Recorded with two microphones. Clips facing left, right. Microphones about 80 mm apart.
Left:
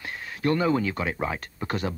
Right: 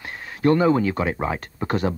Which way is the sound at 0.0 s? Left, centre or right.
Right.